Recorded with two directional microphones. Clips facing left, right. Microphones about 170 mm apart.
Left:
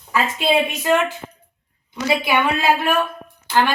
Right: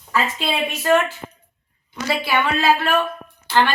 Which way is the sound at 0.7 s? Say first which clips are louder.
Right 1 dB; 15° left (ahead or behind).